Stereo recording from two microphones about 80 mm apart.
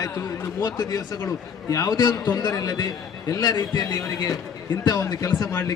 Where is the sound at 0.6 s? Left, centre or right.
Left.